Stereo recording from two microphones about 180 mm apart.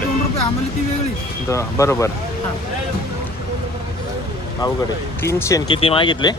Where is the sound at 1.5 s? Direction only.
15° left (ahead or behind).